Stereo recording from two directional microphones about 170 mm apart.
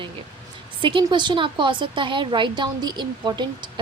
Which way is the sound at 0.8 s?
30° right (ahead or behind).